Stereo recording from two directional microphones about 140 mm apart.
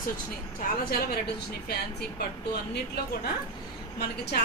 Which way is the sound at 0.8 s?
90° left.